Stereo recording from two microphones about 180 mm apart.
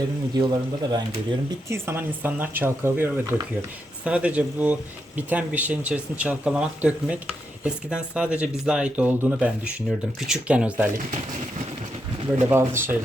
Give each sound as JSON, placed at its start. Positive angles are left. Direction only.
{"t": 0.3, "sound": "a man's voice", "side_deg": -25}
{"t": 1.7, "sound": "speech", "side_deg": -10}
{"t": 12.5, "sound": "speech", "side_deg": -10}